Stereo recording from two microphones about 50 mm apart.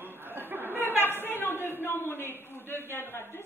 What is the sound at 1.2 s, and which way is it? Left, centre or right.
Speech, left.